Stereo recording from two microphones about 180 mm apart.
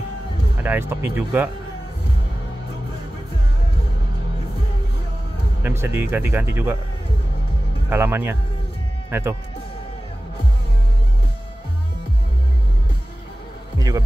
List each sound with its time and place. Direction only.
0.7 s speech: 10° right (ahead or behind)
5.6 s speech: 15° right (ahead or behind)
7.9 s speech: 10° right (ahead or behind)
13.7 s speech: 20° right (ahead or behind)